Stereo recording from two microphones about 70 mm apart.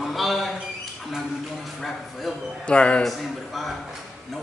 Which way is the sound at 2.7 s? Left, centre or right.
Centre.